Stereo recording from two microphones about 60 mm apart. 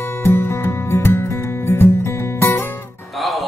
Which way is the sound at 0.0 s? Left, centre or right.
Left.